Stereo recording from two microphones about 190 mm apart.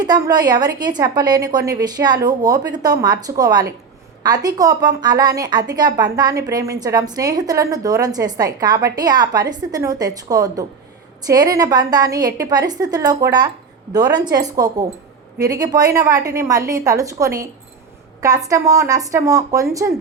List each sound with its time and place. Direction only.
0.0 s a woman's voice: 20° right (ahead or behind)